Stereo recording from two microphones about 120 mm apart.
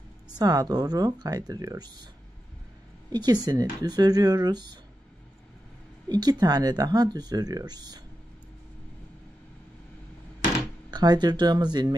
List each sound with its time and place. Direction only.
0.4 s speech: 35° right (ahead or behind)
3.1 s speech: 35° right (ahead or behind)
6.0 s speech: 35° right (ahead or behind)
10.9 s speech: 35° right (ahead or behind)